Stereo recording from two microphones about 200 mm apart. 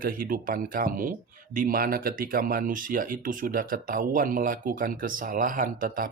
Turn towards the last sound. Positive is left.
turn(degrees=-45)  # may be behind; listen again after turning